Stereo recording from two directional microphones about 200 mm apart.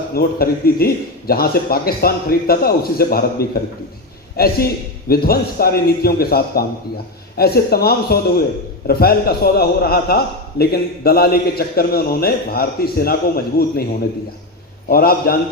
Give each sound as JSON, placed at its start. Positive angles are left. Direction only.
{"t": 0.1, "sound": "a man's voice", "side_deg": 50}
{"t": 14.8, "sound": "a man's voice", "side_deg": 50}